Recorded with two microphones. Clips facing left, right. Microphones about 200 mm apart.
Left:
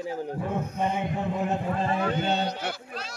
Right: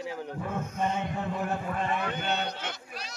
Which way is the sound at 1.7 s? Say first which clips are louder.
Left 4 dB; 30° left (ahead or behind).